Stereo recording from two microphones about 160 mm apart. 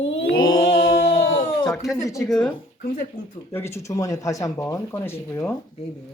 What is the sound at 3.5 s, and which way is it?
Speech, 15° left (ahead or behind).